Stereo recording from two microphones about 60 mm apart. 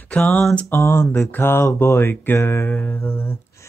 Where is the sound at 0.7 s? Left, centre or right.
Left.